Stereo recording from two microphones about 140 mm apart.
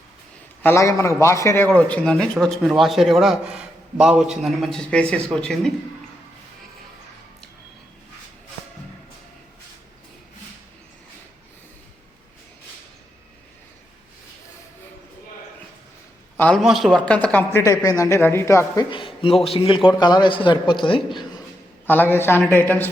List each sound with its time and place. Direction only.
0.6 s a man's voice: 20° left (ahead or behind)
16.6 s a man's voice: centre (ahead or behind)
17.6 s speech: 25° left (ahead or behind)
18.9 s a man's voice: 35° left (ahead or behind)
21.8 s a man's voice: 15° left (ahead or behind)